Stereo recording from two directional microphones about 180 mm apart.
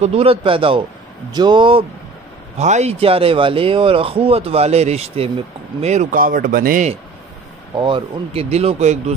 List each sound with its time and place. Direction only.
0.0 s speech: 35° right (ahead or behind)
2.6 s speech: 40° right (ahead or behind)
7.7 s speech: 30° right (ahead or behind)